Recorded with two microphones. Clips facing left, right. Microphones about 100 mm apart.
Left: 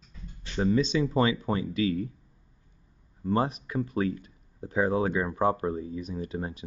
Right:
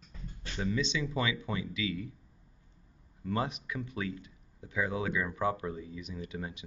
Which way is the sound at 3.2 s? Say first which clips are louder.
Left 6 dB; 35° left (ahead or behind).